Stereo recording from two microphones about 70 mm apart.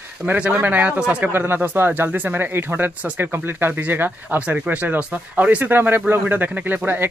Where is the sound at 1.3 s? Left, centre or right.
Right.